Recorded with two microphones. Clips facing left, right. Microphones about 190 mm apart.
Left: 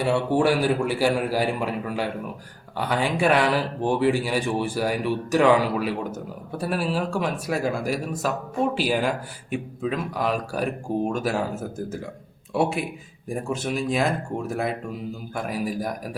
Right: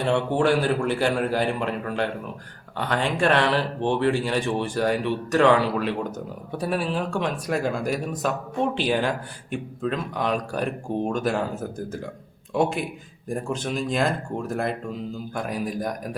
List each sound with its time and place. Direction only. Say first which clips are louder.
0.0 s speech: left 1 dB; 10° left (ahead or behind)